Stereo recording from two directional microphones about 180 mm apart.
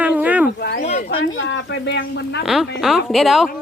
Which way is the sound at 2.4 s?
Centre (ahead or behind).